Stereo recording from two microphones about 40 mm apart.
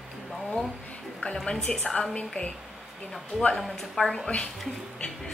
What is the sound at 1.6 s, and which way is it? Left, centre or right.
Speech, left.